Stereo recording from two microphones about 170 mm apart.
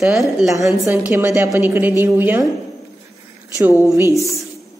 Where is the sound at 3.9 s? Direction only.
15° right (ahead or behind).